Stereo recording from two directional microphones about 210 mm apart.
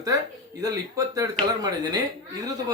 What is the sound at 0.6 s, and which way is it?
Speech, 15° right (ahead or behind).